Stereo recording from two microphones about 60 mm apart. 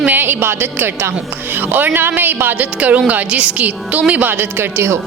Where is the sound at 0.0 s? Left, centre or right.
Right.